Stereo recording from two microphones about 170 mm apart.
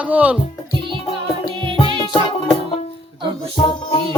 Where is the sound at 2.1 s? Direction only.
30° left (ahead or behind).